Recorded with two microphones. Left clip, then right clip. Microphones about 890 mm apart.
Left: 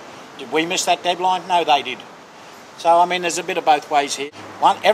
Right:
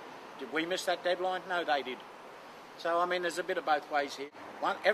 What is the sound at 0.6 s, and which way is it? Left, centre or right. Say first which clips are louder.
Speech: left 14 dB; left.